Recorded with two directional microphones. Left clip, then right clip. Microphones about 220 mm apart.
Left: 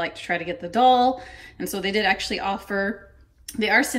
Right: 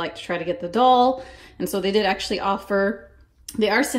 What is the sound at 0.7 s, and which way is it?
A woman's voice, 15° right (ahead or behind).